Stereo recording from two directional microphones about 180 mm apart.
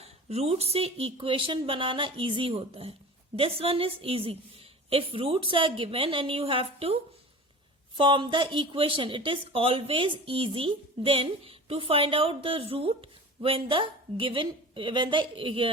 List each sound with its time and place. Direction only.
0.0 s a woman's voice: 35° right (ahead or behind)